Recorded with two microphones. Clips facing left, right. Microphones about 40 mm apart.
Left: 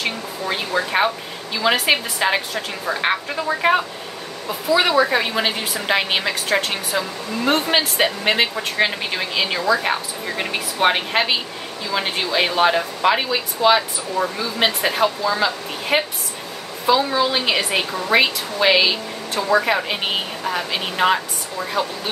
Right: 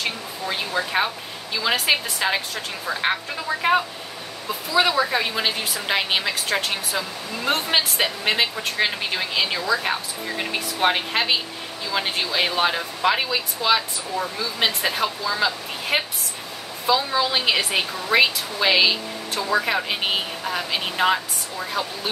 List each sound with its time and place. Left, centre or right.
0.5 s a woman's voice: centre